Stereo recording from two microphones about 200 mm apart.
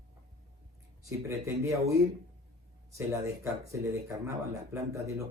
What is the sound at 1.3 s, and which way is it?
Speech, 15° right (ahead or behind).